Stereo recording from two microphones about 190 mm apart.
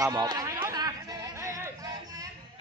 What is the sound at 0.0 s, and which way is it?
Speech, 20° right (ahead or behind).